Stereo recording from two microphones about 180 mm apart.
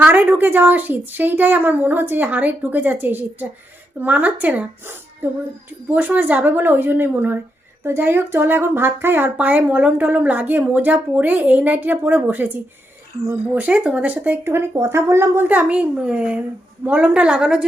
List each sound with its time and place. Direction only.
0.0 s speech: 10° right (ahead or behind)
13.5 s a woman's voice: 10° right (ahead or behind)